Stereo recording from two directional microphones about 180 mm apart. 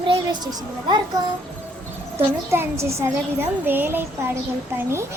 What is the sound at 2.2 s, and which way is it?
A woman's voice, 15° right (ahead or behind).